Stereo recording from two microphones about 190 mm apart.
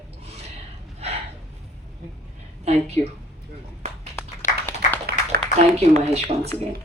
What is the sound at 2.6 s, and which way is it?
Speech, 35° right (ahead or behind).